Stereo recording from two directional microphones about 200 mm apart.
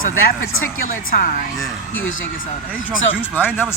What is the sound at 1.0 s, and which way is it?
Speech, 45° left (ahead or behind).